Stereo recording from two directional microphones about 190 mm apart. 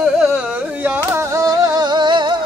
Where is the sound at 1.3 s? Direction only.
20° right (ahead or behind).